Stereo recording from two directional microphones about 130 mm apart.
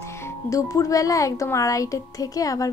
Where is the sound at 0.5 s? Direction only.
25° left (ahead or behind).